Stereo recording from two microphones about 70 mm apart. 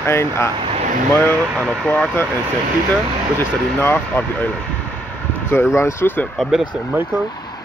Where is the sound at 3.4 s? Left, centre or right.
Left.